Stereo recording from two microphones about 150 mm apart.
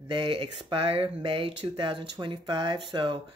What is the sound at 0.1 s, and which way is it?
Speech, 35° right (ahead or behind).